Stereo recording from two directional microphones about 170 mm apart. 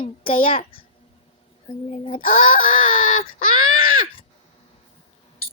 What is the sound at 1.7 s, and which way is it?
Speech, 30° left (ahead or behind).